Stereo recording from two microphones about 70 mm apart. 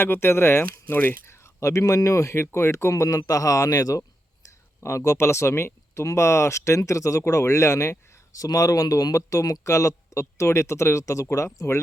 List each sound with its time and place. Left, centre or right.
0.0 s speech: left
0.6 s speech: left
1.6 s speech: left
2.9 s speech: left